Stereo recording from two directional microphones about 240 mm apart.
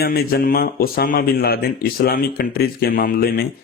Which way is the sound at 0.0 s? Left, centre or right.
Left.